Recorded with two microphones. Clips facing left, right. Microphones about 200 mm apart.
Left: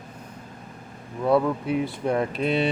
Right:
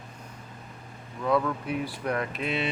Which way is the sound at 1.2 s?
30° left (ahead or behind).